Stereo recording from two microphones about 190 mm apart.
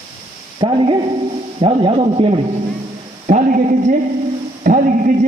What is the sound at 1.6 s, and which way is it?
Speech, 30° right (ahead or behind).